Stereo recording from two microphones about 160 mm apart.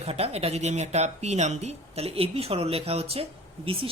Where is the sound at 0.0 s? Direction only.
40° right (ahead or behind).